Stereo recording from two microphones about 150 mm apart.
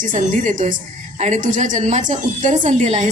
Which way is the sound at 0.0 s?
60° right (ahead or behind).